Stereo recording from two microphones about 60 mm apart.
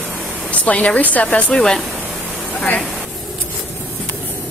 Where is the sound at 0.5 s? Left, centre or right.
Left.